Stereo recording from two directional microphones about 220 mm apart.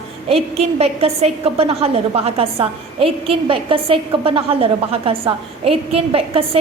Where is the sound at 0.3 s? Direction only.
25° right (ahead or behind).